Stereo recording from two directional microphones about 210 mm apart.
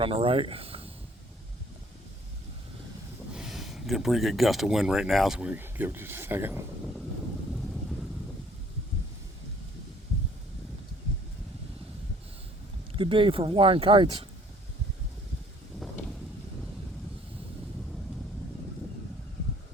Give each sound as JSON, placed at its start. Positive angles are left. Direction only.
{"t": 0.0, "sound": "speech", "side_deg": -25}
{"t": 3.3, "sound": "speech", "side_deg": 0}
{"t": 12.9, "sound": "speech", "side_deg": -25}